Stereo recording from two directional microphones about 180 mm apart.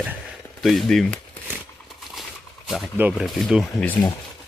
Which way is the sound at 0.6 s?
Centre (ahead or behind).